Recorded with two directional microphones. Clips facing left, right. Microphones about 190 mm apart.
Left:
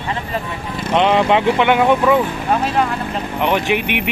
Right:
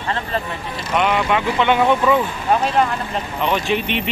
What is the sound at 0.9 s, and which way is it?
Speech, 30° left (ahead or behind).